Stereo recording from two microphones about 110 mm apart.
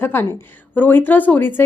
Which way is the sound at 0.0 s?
20° left (ahead or behind).